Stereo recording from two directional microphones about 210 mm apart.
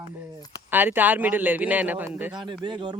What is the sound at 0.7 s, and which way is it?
Speech, 10° right (ahead or behind).